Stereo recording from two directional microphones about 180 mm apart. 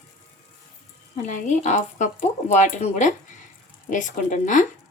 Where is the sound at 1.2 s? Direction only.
40° left (ahead or behind).